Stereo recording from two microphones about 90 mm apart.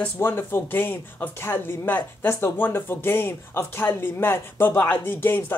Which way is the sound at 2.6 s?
25° left (ahead or behind).